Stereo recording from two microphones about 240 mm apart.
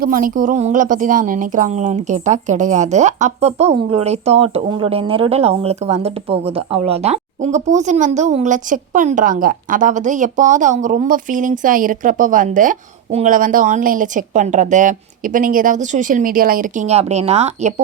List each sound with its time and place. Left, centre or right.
0.0 s a woman's voice: right